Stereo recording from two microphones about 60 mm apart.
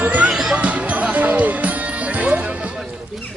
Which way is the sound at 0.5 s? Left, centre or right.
Right.